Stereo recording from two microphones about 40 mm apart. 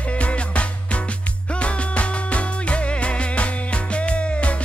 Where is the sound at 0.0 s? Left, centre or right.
Left.